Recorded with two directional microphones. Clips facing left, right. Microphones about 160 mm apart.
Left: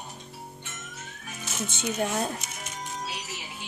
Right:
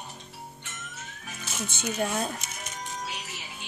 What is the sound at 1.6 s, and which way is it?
Speech, 20° left (ahead or behind).